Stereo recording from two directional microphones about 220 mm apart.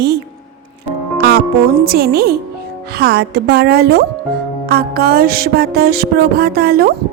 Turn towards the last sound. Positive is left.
turn(degrees=-45)  # may be behind; listen again after turning